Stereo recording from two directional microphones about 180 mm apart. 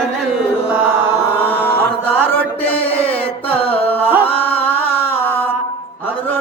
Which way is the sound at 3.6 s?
30° left (ahead or behind).